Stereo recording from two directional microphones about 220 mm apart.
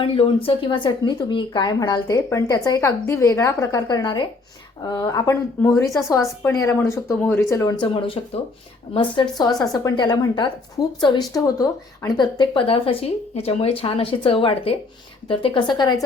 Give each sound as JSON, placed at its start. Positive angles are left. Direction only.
{"t": 0.0, "sound": "a woman's voice", "side_deg": 25}